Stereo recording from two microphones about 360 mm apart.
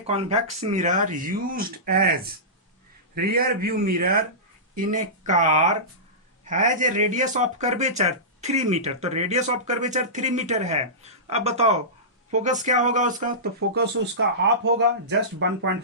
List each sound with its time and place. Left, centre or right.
0.1 s speech: centre
3.2 s speech: right